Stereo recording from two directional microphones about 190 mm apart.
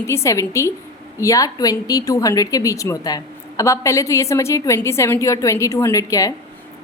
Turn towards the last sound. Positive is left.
turn(degrees=20)  # may be behind; listen again after turning